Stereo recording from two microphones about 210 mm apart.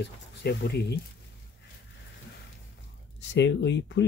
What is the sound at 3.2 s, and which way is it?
Speech, 60° left (ahead or behind).